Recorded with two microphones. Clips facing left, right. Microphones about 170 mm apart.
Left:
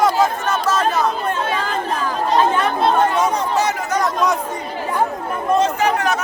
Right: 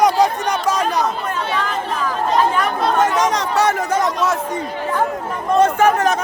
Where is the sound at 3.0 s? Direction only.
90° right.